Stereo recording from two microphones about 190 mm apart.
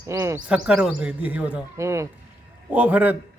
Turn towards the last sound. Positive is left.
turn(degrees=-5)  # may be behind; listen again after turning